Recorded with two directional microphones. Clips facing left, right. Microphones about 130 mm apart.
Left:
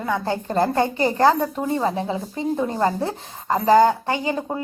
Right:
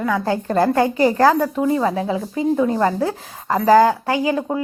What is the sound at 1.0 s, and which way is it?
A child's voice, 25° left (ahead or behind).